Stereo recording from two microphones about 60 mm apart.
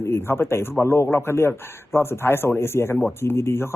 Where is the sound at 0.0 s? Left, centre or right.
Left.